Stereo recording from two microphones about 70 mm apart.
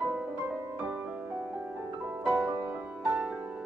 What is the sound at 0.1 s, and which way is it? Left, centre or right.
Music, right.